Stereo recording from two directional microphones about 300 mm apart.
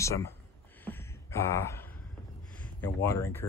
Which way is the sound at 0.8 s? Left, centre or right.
Centre.